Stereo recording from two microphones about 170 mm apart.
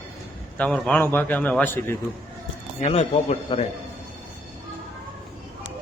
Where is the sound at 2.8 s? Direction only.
40° left (ahead or behind).